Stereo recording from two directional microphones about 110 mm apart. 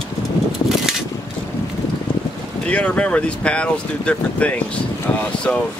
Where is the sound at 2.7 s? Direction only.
10° left (ahead or behind).